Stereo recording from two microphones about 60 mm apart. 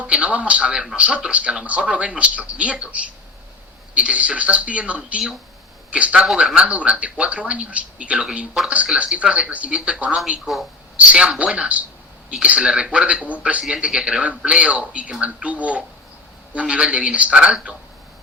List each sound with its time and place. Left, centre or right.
0.0 s a man's voice: centre
10.4 s a man's voice: centre
10.9 s a man's voice: centre
16.6 s a man's voice: centre